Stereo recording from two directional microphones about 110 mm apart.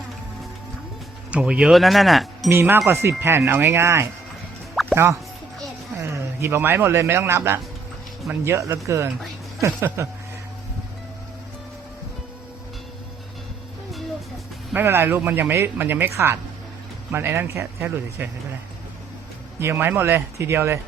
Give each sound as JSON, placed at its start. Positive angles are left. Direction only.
{"t": 1.3, "sound": "speech", "side_deg": -10}
{"t": 2.5, "sound": "a man's voice", "side_deg": -25}
{"t": 4.7, "sound": "music", "side_deg": 0}
{"t": 6.0, "sound": "a man's voice", "side_deg": -25}
{"t": 14.7, "sound": "a man's voice", "side_deg": -20}
{"t": 19.5, "sound": "a man's voice", "side_deg": -20}